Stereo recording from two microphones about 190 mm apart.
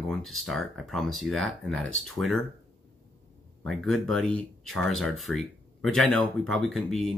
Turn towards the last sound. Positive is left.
turn(degrees=0)  # may be behind; listen again after turning